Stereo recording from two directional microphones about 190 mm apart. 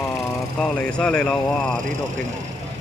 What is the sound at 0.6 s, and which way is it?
Speech, 5° left (ahead or behind).